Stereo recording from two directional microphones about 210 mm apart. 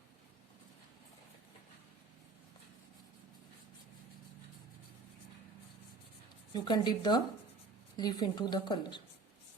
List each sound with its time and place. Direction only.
6.5 s a woman's voice: 20° left (ahead or behind)